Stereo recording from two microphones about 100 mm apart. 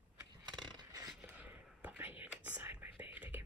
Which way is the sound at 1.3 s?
15° right (ahead or behind).